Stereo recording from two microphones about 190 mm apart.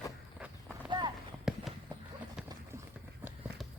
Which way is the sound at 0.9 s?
25° right (ahead or behind).